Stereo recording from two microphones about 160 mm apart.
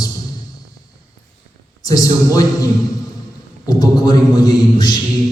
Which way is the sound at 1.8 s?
20° left (ahead or behind).